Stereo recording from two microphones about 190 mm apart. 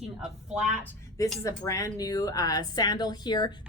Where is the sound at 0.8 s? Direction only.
15° left (ahead or behind).